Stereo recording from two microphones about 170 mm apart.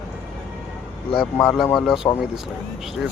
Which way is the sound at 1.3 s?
15° left (ahead or behind).